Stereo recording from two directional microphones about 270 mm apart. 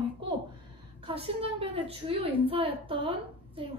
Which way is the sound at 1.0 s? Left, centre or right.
Right.